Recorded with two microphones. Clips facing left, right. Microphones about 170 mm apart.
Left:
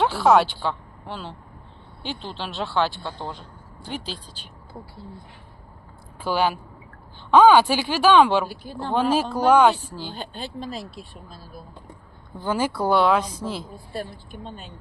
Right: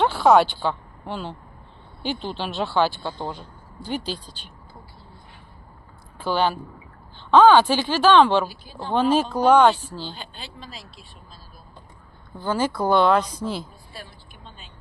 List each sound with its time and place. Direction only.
0.0 s a woman's voice: centre (ahead or behind)
6.1 s speech: 10° left (ahead or behind)
8.4 s speech: 60° left (ahead or behind)
8.9 s speech: 5° left (ahead or behind)
10.2 s speech: 50° left (ahead or behind)
12.4 s speech: 10° left (ahead or behind)
13.7 s speech: 50° left (ahead or behind)